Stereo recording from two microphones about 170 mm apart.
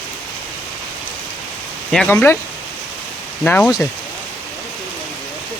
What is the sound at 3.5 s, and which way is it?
Speech, 10° left (ahead or behind).